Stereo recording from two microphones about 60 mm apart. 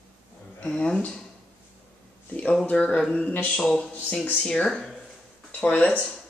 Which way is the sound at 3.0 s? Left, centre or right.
Centre.